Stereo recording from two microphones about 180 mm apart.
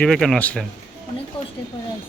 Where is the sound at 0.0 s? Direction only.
5° left (ahead or behind).